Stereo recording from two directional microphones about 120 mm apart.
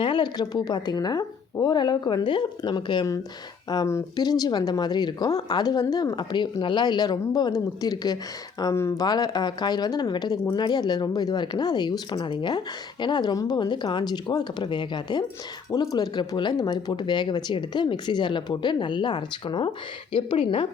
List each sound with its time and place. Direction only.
0.0 s speech: 40° left (ahead or behind)
3.8 s speech: 25° left (ahead or behind)
4.2 s speech: 35° left (ahead or behind)
8.7 s speech: 20° left (ahead or behind)
9.0 s speech: 35° left (ahead or behind)